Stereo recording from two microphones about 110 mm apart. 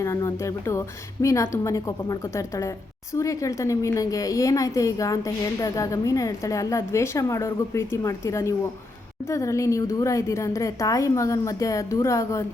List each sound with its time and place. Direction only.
0.0 s a woman's voice: 25° left (ahead or behind)